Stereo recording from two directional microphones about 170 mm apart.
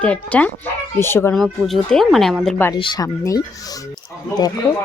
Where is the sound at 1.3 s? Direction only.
Centre (ahead or behind).